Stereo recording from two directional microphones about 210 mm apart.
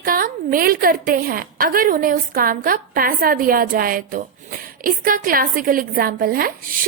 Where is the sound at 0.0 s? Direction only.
40° right (ahead or behind).